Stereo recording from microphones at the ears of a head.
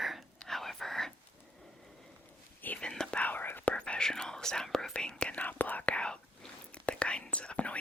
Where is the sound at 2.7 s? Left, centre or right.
Centre.